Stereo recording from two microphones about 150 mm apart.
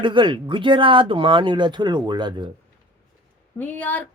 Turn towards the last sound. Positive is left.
turn(degrees=10)  # may be behind; listen again after turning